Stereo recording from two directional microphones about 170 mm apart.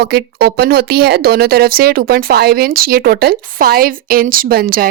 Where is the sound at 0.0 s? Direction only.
75° right (ahead or behind).